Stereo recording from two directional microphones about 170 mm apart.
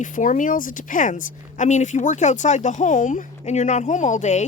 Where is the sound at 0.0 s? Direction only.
50° left (ahead or behind).